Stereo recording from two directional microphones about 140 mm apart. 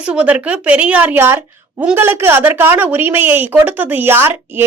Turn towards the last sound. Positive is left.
turn(degrees=-15)  # may be behind; listen again after turning